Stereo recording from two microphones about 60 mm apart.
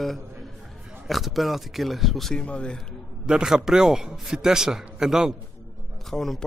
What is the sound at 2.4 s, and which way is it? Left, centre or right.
Speech, centre.